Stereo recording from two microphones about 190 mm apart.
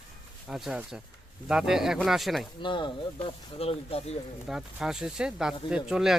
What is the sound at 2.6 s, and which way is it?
Speech, 25° left (ahead or behind).